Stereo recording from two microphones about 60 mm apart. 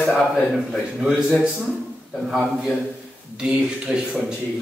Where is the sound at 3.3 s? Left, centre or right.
Centre.